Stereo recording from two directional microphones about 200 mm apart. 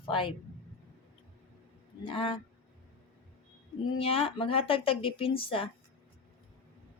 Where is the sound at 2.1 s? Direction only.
25° left (ahead or behind).